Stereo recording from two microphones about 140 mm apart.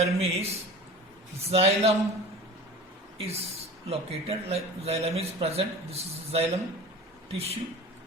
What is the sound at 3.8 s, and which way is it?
A man's voice, 45° right (ahead or behind).